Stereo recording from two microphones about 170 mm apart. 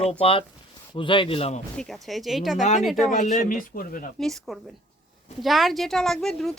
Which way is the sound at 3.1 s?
45° left (ahead or behind).